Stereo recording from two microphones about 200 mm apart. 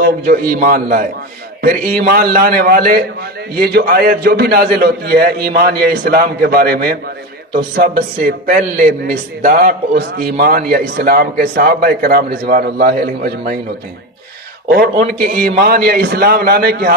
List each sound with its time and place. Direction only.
0.0 s a man's voice: 45° right (ahead or behind)
15.2 s a man's voice: 45° right (ahead or behind)